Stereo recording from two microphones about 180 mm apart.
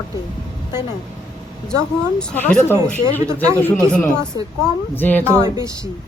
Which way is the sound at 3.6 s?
5° left (ahead or behind).